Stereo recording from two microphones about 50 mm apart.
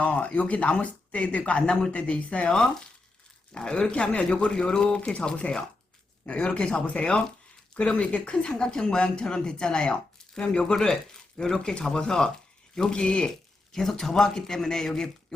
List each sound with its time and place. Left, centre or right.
0.0 s speech: left; by 15.1 s centre